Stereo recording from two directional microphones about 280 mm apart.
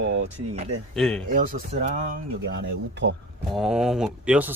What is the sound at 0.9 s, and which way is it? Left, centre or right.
Speech, centre.